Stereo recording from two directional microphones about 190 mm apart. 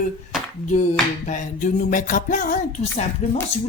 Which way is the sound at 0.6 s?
40° left (ahead or behind).